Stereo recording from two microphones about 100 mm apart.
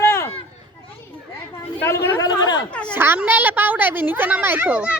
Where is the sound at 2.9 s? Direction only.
20° right (ahead or behind).